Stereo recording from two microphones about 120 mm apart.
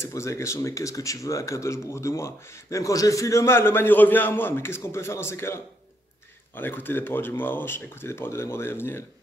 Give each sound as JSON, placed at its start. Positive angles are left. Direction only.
{"t": 0.0, "sound": "speech", "side_deg": 25}